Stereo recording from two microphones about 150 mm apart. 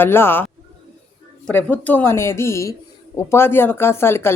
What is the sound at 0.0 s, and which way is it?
Speech, 15° left (ahead or behind).